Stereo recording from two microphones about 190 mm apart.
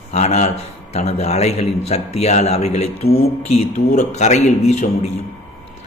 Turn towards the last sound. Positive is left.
turn(degrees=35)  # may be behind; listen again after turning